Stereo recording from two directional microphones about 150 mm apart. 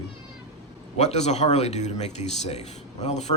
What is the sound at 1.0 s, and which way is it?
Speech, 50° left (ahead or behind).